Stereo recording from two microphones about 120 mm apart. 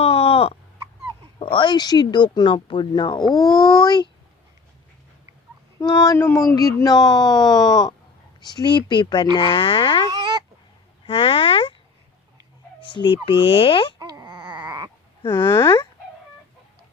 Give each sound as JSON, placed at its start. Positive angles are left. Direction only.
{"t": 0.0, "sound": "a sound", "side_deg": 55}
{"t": 1.4, "sound": "speech", "side_deg": 45}
{"t": 3.2, "sound": "speech", "side_deg": 0}
{"t": 3.7, "sound": "speech", "side_deg": 35}
{"t": 5.8, "sound": "speech", "side_deg": 30}
{"t": 9.4, "sound": "frog", "side_deg": 45}
{"t": 10.1, "sound": "a sound", "side_deg": -35}
{"t": 11.0, "sound": "a sound", "side_deg": 50}
{"t": 12.8, "sound": "speech", "side_deg": 45}
{"t": 14.0, "sound": "baby cry", "side_deg": -35}
{"t": 15.3, "sound": "speech", "side_deg": 40}
{"t": 15.5, "sound": "speech", "side_deg": 20}